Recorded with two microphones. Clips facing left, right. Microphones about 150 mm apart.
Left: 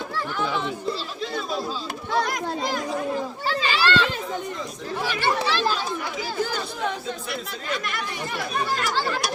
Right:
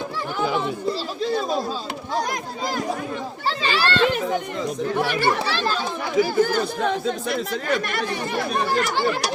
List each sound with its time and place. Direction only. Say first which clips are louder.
3.4 s speech: right 2 dB; 35° right (ahead or behind)
5.0 s speech: right 2 dB; 45° right (ahead or behind)